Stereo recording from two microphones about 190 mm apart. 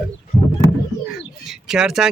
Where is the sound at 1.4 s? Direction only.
5° right (ahead or behind).